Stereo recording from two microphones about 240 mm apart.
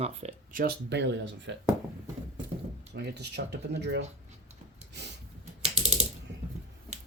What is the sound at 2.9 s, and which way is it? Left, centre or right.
Speech, right.